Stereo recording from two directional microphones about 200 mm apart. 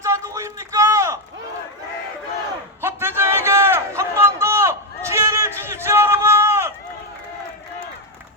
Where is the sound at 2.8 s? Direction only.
10° right (ahead or behind).